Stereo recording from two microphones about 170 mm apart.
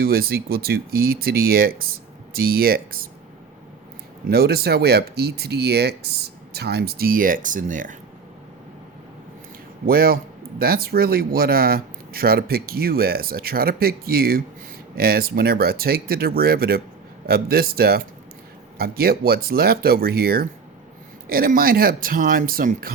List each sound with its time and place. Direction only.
0.0 s speech: 65° right (ahead or behind)
4.3 s speech: 65° right (ahead or behind); by 7.9 s 50° right (ahead or behind)
9.8 s speech: 60° right (ahead or behind)